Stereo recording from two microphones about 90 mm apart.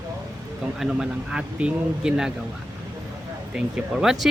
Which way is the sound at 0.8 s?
10° right (ahead or behind).